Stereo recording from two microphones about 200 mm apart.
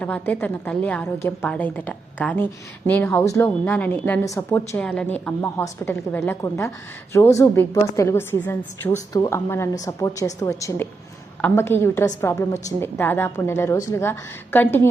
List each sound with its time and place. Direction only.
0.0 s a woman's voice: 10° left (ahead or behind)